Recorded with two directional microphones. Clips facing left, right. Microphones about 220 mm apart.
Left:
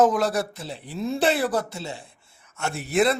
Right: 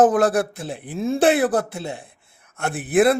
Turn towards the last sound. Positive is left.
turn(degrees=-55)  # may be behind; listen again after turning